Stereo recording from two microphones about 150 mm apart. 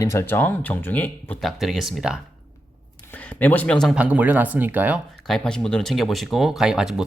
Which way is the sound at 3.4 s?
10° left (ahead or behind).